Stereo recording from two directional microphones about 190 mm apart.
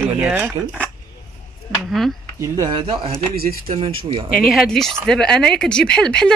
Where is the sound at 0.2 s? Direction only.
10° right (ahead or behind).